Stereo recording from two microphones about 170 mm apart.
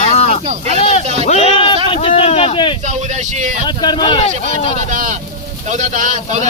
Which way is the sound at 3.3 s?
45° right (ahead or behind).